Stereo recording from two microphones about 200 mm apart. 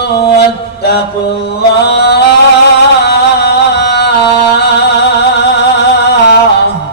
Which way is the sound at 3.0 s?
55° left (ahead or behind).